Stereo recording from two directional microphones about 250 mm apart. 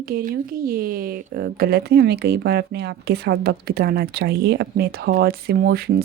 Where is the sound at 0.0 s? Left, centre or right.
Right.